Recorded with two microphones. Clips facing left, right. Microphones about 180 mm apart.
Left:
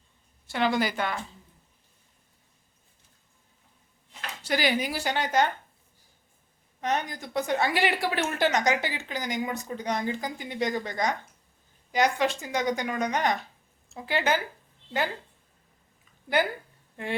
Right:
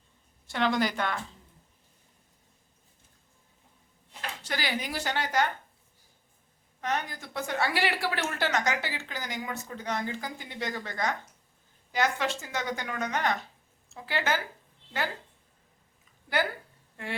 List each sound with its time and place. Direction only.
0.4 s a woman's voice: 5° left (ahead or behind)
4.4 s a woman's voice: 15° left (ahead or behind)
6.8 s a woman's voice: 20° left (ahead or behind)